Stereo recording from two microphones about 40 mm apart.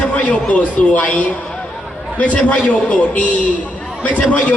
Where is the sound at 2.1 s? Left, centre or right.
Left.